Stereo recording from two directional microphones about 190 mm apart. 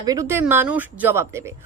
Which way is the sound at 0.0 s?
20° right (ahead or behind).